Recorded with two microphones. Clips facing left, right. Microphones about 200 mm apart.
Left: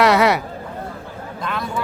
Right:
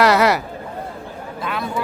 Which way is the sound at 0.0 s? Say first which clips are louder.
Even; centre (ahead or behind).